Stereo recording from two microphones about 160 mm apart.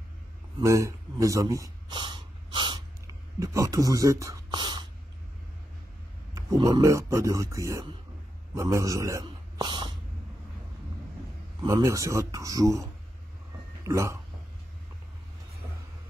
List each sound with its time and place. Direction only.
0.6 s a man's voice: 20° right (ahead or behind)
2.0 s snort: 30° right (ahead or behind)
3.3 s speech: 20° right (ahead or behind)
6.3 s speech: 20° right (ahead or behind)
9.2 s whispering: 30° right (ahead or behind)
11.6 s speech: 20° right (ahead or behind)
13.8 s speech: 20° right (ahead or behind)